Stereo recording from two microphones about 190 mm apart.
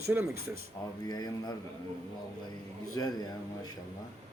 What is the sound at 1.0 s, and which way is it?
Speech, 20° left (ahead or behind).